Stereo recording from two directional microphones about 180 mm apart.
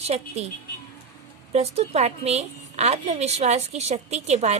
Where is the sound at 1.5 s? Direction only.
35° right (ahead or behind).